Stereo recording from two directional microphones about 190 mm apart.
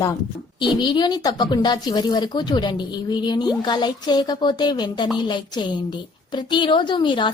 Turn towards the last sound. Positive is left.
turn(degrees=25)  # may be behind; listen again after turning